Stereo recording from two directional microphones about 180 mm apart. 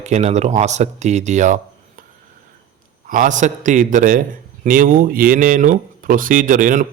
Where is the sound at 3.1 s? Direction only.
45° right (ahead or behind).